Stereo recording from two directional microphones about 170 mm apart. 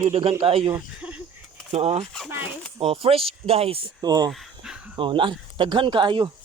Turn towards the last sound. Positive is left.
turn(degrees=-30)  # may be behind; listen again after turning